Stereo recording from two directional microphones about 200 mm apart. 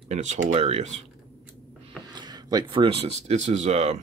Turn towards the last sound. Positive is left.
turn(degrees=-35)  # may be behind; listen again after turning